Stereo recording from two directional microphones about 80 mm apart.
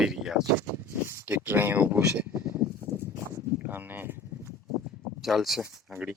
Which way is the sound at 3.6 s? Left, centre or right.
Right.